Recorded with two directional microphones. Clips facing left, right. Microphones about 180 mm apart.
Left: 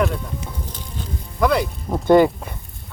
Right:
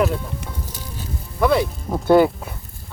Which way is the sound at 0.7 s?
5° right (ahead or behind).